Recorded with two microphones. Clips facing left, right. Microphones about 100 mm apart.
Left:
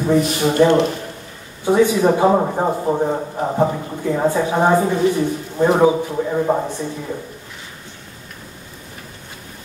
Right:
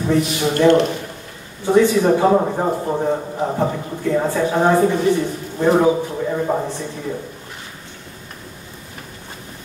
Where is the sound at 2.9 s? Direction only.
30° left (ahead or behind).